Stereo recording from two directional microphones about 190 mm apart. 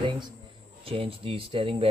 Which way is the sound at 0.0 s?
25° right (ahead or behind).